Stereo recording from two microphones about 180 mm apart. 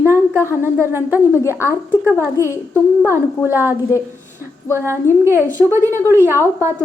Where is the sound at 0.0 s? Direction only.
10° right (ahead or behind).